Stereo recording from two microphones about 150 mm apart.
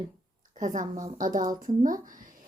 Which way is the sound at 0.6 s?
60° right (ahead or behind).